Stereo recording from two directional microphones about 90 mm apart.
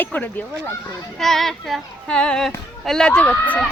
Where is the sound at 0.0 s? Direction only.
20° left (ahead or behind).